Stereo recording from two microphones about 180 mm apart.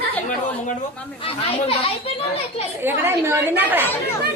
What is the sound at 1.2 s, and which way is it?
Speech, 30° left (ahead or behind).